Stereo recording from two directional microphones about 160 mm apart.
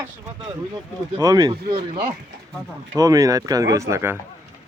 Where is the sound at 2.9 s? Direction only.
20° right (ahead or behind).